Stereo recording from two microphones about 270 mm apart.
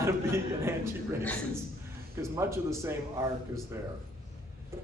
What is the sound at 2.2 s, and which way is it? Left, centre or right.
Speech, centre.